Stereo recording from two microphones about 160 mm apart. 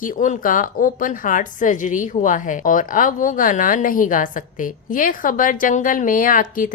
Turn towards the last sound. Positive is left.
turn(degrees=60)  # may be behind; listen again after turning